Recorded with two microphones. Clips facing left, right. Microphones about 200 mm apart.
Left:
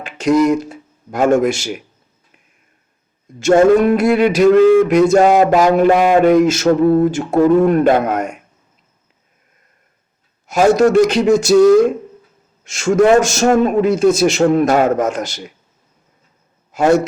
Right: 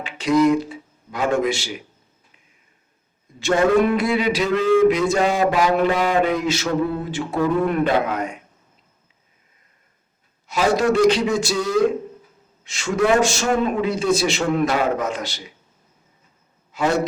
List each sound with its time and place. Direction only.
0.0 s speech: 45° left (ahead or behind)
3.4 s mantra: 45° left (ahead or behind)
10.4 s mantra: 45° left (ahead or behind)
16.7 s mantra: 45° left (ahead or behind)